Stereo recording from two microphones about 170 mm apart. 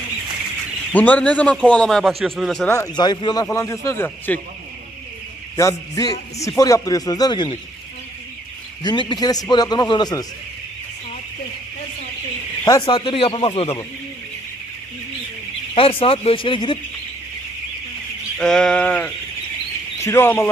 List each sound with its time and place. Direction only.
0.9 s a man's voice: 10° left (ahead or behind)
2.7 s a man's voice: 20° left (ahead or behind)
5.5 s a man's voice: 20° left (ahead or behind)
8.8 s a man's voice: 25° left (ahead or behind)
12.8 s speech: 30° left (ahead or behind)
15.7 s speech: 35° left (ahead or behind)
18.3 s a man's voice: 5° left (ahead or behind)